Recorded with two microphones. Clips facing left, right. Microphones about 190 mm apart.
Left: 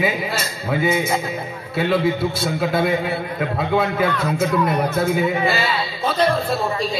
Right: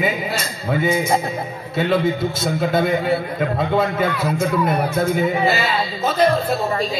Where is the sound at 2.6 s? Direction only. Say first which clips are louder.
Right 1 dB; 45° right (ahead or behind).